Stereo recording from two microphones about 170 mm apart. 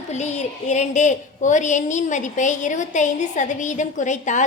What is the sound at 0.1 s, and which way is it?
A woman's voice, 40° left (ahead or behind).